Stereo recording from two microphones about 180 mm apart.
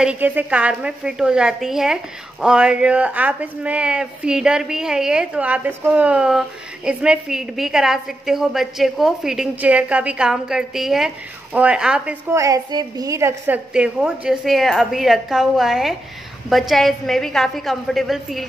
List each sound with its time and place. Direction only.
0.0 s speech: 10° right (ahead or behind)
12.3 s speech: 20° right (ahead or behind); by 18.4 s centre (ahead or behind)